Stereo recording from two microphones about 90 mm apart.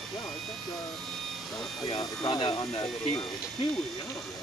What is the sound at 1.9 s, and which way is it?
Speech, 50° left (ahead or behind).